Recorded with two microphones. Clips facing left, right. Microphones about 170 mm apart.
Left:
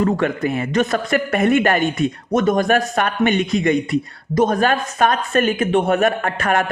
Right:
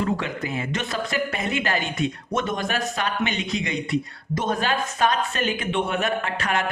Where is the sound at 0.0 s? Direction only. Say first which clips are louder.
Left 8 dB; 55° left (ahead or behind).